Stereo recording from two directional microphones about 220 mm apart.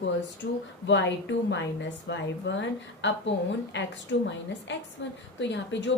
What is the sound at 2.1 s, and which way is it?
A woman's voice, 55° left (ahead or behind).